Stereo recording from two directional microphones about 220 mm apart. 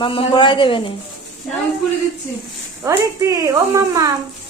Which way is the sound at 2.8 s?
15° right (ahead or behind).